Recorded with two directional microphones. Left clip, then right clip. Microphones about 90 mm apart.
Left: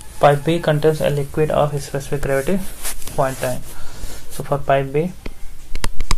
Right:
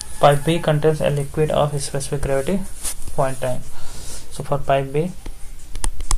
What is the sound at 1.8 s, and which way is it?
Speech, 15° left (ahead or behind).